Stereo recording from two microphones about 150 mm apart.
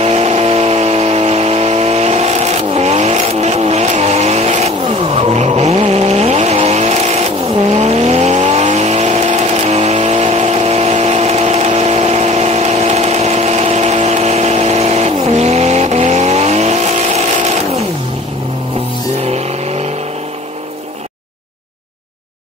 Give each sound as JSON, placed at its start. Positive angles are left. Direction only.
{"t": 0.0, "sound": "vehicle", "side_deg": -45}
{"t": 19.2, "sound": "vehicle", "side_deg": -45}